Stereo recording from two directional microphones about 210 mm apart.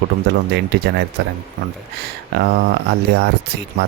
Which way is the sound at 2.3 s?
50° right (ahead or behind).